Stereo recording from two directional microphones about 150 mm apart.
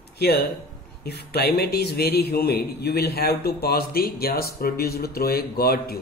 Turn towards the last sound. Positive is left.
turn(degrees=90)